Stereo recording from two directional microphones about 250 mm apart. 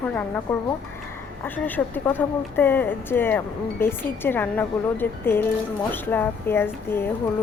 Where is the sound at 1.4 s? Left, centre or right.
Centre.